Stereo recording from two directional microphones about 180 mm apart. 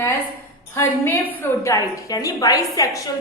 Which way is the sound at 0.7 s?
15° left (ahead or behind).